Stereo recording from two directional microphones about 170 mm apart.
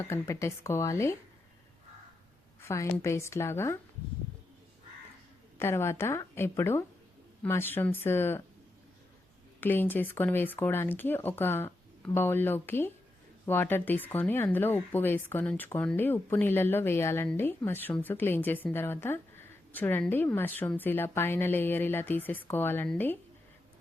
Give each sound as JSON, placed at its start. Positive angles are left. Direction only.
{"t": 0.0, "sound": "speech", "side_deg": 15}
{"t": 2.6, "sound": "speech", "side_deg": 15}
{"t": 5.5, "sound": "speech", "side_deg": 15}
{"t": 9.6, "sound": "speech", "side_deg": 10}